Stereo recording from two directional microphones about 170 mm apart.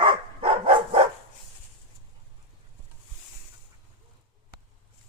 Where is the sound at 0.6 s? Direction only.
30° right (ahead or behind).